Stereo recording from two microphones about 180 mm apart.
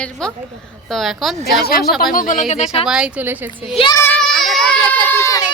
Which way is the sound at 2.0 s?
50° left (ahead or behind).